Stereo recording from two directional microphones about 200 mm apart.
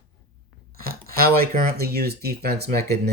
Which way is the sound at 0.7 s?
50° right (ahead or behind).